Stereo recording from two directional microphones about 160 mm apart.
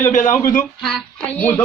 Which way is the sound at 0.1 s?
50° left (ahead or behind).